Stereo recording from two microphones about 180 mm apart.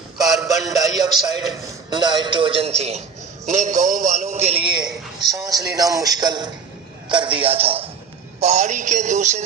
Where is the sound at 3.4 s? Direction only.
40° right (ahead or behind).